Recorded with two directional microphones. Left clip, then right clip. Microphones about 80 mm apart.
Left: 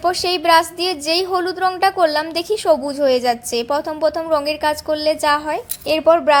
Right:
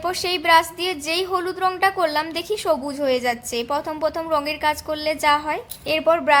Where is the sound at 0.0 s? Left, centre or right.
Left.